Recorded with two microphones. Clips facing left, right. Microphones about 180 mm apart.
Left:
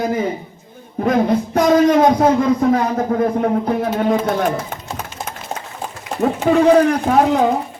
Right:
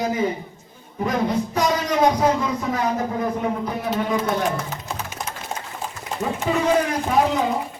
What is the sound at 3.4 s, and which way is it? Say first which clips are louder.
Speech: left 7 dB; 55° left (ahead or behind).